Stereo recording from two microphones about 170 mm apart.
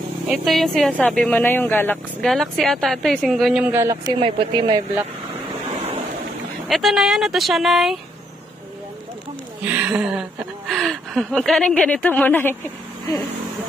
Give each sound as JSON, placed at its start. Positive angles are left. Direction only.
{"t": 0.3, "sound": "a woman's voice", "side_deg": 0}
{"t": 4.1, "sound": "speech", "side_deg": -30}
{"t": 6.7, "sound": "a woman's voice", "side_deg": 0}
{"t": 9.6, "sound": "a woman's voice", "side_deg": -10}